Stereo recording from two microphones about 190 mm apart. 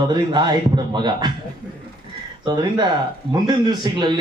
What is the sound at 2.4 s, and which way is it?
Speech, 25° right (ahead or behind).